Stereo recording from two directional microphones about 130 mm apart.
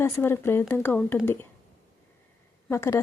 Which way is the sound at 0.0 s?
20° left (ahead or behind).